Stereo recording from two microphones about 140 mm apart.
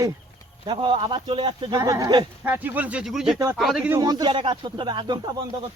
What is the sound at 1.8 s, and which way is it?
Speech, 25° right (ahead or behind).